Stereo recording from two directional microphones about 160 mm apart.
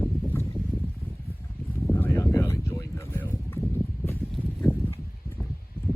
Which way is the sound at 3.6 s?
15° left (ahead or behind).